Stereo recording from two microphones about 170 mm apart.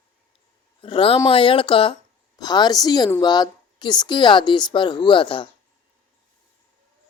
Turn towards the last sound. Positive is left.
turn(degrees=30)  # may be behind; listen again after turning